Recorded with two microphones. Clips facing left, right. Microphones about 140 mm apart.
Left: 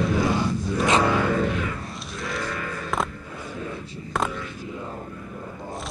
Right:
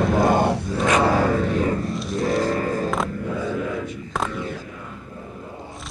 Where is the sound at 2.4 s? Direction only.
40° right (ahead or behind).